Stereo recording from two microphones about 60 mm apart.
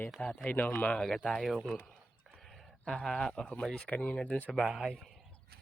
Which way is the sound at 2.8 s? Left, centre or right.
Centre.